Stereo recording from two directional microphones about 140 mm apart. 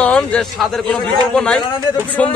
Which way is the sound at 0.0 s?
5° left (ahead or behind).